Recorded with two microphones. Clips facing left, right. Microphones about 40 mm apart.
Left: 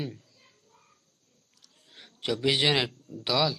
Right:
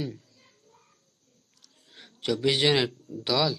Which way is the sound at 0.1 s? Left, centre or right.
Centre.